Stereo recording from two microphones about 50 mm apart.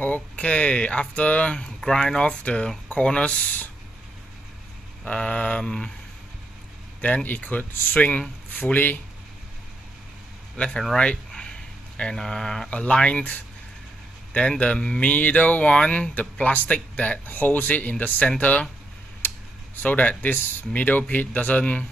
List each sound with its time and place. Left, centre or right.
0.0 s speech: left
5.0 s speech: left
7.2 s speech: left
10.6 s speech: left
12.0 s speech: centre
12.6 s speech: left
17.3 s speech: left
19.8 s speech: left